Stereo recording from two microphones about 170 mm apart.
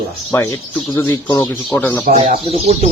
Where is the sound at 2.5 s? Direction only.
40° right (ahead or behind).